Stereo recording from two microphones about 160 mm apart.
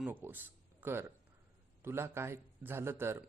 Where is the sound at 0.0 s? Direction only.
10° right (ahead or behind).